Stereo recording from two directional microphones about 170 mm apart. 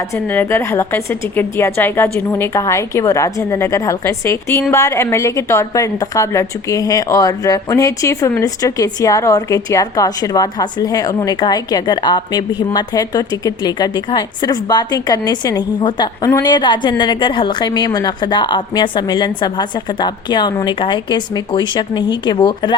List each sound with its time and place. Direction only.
0.3 s a woman's voice: 10° left (ahead or behind)